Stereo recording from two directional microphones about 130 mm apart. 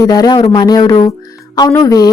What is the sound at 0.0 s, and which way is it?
A woman's voice, 30° left (ahead or behind).